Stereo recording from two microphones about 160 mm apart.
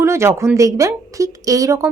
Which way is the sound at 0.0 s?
15° right (ahead or behind).